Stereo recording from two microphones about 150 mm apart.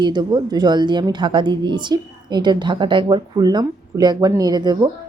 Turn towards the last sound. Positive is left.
turn(degrees=-30)  # may be behind; listen again after turning